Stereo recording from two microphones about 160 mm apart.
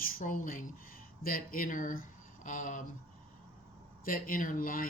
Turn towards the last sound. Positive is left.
turn(degrees=60)  # may be behind; listen again after turning